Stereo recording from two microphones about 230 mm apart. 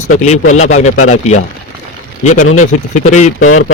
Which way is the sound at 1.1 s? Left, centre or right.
Left.